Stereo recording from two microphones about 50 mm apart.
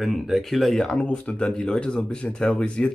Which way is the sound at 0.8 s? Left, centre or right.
Left.